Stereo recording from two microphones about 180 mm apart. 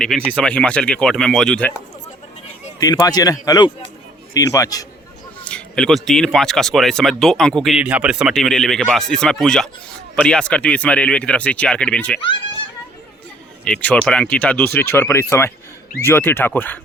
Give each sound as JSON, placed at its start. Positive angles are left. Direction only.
{"t": 0.0, "sound": "a man's voice", "side_deg": 5}
{"t": 2.8, "sound": "speech", "side_deg": 20}
{"t": 5.5, "sound": "a man's voice", "side_deg": 5}
{"t": 13.7, "sound": "speech", "side_deg": 5}